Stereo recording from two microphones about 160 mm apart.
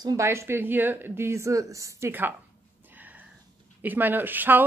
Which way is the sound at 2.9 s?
10° right (ahead or behind).